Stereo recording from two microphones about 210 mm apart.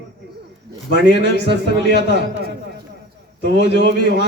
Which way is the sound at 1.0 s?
55° right (ahead or behind).